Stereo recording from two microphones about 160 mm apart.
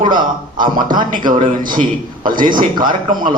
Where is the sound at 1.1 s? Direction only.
55° right (ahead or behind).